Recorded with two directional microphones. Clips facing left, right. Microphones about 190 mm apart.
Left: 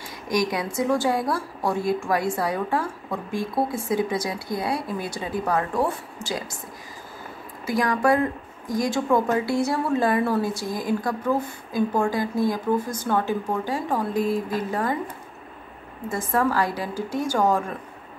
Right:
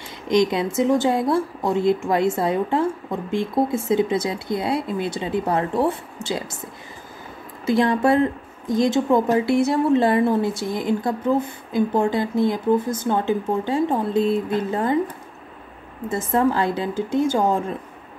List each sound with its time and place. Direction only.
0.3 s a woman's voice: 25° right (ahead or behind)
7.6 s a woman's voice: 25° right (ahead or behind)
16.1 s a woman's voice: 25° right (ahead or behind)